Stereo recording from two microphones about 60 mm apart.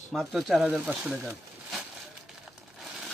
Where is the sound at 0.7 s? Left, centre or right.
Right.